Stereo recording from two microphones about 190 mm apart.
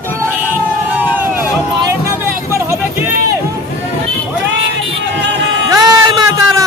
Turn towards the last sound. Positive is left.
turn(degrees=-20)  # may be behind; listen again after turning